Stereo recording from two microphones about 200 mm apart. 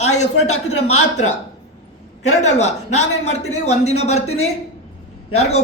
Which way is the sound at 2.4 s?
35° left (ahead or behind).